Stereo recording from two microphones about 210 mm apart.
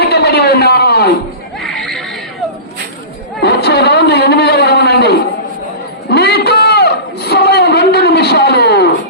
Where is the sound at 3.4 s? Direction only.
50° left (ahead or behind).